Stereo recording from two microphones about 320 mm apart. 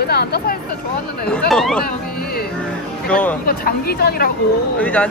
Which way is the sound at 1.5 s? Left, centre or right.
Centre.